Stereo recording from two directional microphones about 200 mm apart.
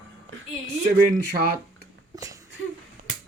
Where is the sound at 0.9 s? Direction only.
45° right (ahead or behind).